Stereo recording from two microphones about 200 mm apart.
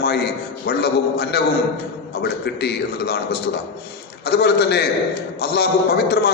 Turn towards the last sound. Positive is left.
turn(degrees=55)  # may be behind; listen again after turning